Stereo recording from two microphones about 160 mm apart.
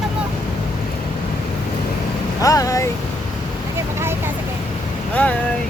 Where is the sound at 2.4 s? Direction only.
20° left (ahead or behind).